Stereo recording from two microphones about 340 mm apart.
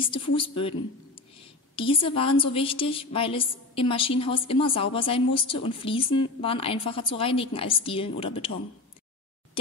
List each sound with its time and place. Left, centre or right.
0.0 s a woman's voice: centre
1.8 s a woman's voice: centre